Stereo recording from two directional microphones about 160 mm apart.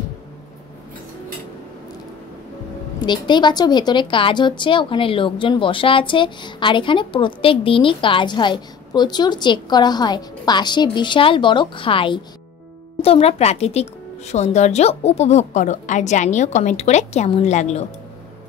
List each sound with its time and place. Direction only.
3.1 s a woman's voice: 30° left (ahead or behind); by 17.8 s 45° left (ahead or behind)